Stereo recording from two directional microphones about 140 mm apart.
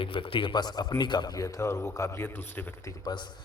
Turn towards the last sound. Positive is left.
turn(degrees=30)  # may be behind; listen again after turning